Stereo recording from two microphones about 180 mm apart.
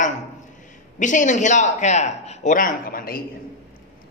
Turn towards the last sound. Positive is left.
turn(degrees=55)  # may be behind; listen again after turning